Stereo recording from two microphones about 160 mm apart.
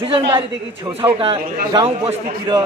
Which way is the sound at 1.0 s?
35° right (ahead or behind).